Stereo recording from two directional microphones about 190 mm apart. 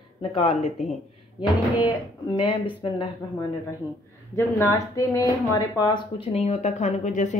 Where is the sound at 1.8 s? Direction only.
25° left (ahead or behind).